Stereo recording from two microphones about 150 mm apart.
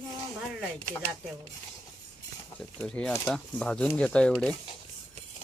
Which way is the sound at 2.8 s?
5° left (ahead or behind).